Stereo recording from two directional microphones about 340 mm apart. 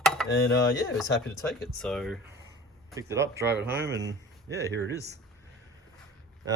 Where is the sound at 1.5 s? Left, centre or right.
Centre.